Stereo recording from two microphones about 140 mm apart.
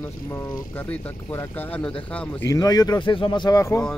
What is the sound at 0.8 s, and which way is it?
Speech, 15° left (ahead or behind).